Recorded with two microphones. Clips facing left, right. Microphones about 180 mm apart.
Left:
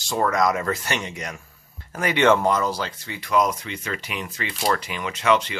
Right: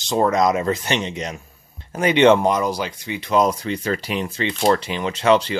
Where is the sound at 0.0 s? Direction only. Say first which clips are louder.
Right 4 dB; 20° right (ahead or behind).